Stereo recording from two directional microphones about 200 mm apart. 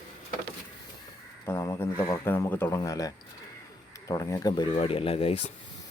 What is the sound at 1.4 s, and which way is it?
Speech, 15° left (ahead or behind).